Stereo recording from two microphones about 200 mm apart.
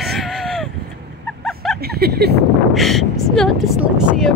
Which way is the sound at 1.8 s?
50° right (ahead or behind).